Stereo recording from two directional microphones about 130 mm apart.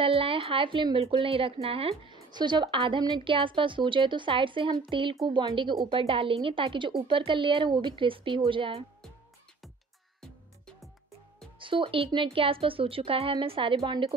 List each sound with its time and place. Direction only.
0.0 s speech: 45° right (ahead or behind)
11.6 s speech: 40° right (ahead or behind)